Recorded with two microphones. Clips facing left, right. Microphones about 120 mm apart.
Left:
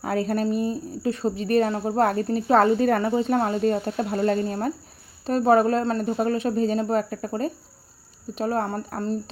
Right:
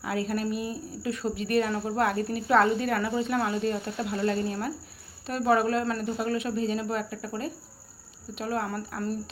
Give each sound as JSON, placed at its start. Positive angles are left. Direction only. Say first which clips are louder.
{"t": 0.0, "sound": "speech", "louder": "left 5 dB", "side_deg": 40}